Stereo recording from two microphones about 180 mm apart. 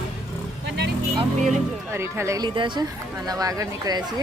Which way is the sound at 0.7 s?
65° right (ahead or behind).